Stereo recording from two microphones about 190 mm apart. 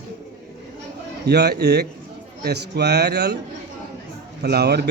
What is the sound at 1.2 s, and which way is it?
Speech, 60° right (ahead or behind).